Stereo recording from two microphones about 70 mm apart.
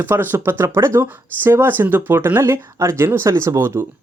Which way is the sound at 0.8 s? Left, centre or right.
Right.